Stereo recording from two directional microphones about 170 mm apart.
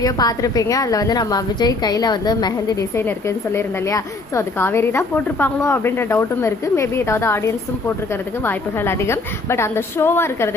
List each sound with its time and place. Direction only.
0.0 s a woman's voice: 20° left (ahead or behind)